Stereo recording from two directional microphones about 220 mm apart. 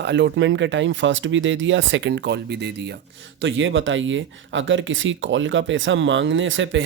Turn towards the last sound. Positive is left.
turn(degrees=-60)  # may be behind; listen again after turning